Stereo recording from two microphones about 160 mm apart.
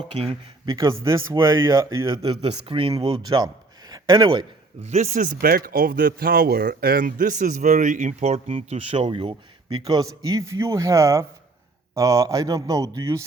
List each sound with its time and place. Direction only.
0.3 s speech: 25° right (ahead or behind)
4.8 s speech: 45° right (ahead or behind); by 13.2 s 20° right (ahead or behind)